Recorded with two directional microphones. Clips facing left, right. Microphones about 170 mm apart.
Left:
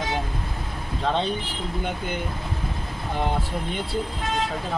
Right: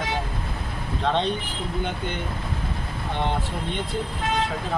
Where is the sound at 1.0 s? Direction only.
Centre (ahead or behind).